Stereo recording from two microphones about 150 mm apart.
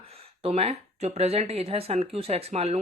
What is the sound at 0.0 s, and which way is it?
Speech, 40° right (ahead or behind).